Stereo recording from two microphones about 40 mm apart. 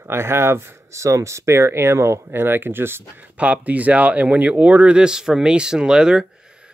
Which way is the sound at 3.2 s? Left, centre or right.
Right.